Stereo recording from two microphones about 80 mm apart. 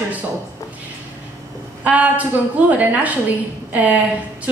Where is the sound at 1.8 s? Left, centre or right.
Centre.